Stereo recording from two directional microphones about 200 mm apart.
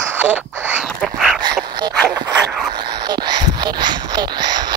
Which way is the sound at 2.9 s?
20° right (ahead or behind).